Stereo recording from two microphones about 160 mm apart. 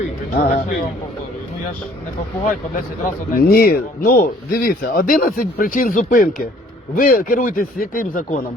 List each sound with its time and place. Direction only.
0.3 s speech: 60° left (ahead or behind)
3.3 s speech: 70° left (ahead or behind)